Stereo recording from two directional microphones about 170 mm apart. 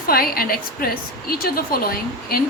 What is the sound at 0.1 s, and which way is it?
A woman's voice, 60° left (ahead or behind).